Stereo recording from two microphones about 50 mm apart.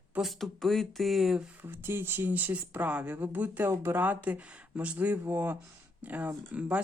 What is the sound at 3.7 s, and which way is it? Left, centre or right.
Speech, right.